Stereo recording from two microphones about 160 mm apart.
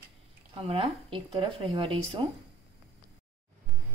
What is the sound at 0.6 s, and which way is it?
Speech, 35° right (ahead or behind).